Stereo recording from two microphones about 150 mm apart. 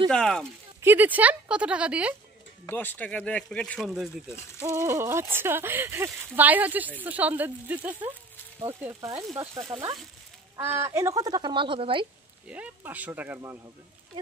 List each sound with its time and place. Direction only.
0.1 s speech: 5° left (ahead or behind)
0.7 s speech: 15° right (ahead or behind)
2.6 s speech: 15° left (ahead or behind)
4.6 s speech: 20° right (ahead or behind)
10.5 s speech: 15° right (ahead or behind); by 12.1 s 35° right (ahead or behind)
12.4 s speech: 10° right (ahead or behind)